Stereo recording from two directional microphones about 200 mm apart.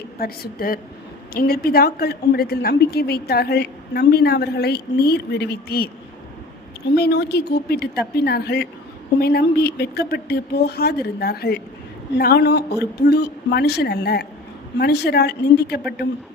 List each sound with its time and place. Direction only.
0.2 s a woman's voice: 50° left (ahead or behind)
6.9 s a woman's voice: 55° left (ahead or behind)